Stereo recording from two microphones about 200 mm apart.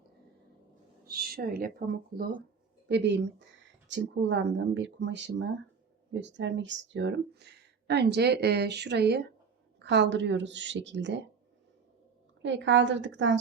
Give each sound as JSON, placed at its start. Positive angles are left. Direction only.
{"t": 1.0, "sound": "speech", "side_deg": -50}
{"t": 2.9, "sound": "speech", "side_deg": -60}
{"t": 12.4, "sound": "speech", "side_deg": -65}